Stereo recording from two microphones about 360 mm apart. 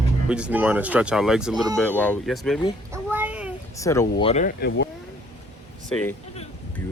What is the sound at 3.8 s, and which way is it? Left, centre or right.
Speech, centre.